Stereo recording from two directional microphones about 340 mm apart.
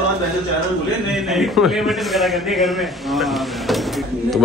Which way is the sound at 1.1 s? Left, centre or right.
Centre.